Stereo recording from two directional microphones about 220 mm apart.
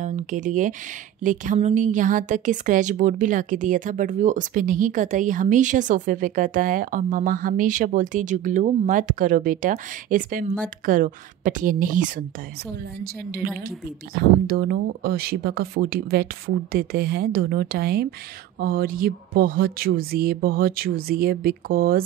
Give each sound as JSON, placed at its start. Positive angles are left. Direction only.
{"t": 0.0, "sound": "a woman's voice", "side_deg": -35}